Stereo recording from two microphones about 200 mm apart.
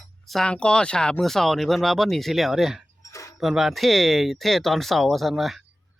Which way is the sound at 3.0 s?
15° left (ahead or behind).